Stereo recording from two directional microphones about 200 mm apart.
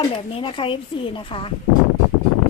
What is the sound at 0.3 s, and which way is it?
Speech, 25° left (ahead or behind).